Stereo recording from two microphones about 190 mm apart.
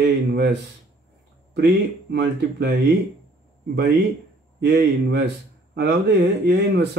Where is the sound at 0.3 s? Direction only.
60° right (ahead or behind).